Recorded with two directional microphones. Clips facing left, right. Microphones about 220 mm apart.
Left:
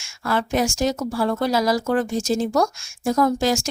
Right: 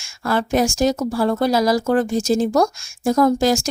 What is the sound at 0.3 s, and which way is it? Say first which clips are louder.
Speech: right 3 dB; 40° right (ahead or behind).